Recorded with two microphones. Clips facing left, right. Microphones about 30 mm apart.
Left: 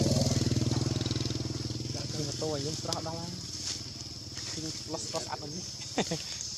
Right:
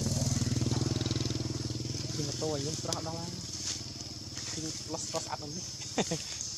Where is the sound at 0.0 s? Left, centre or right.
Left.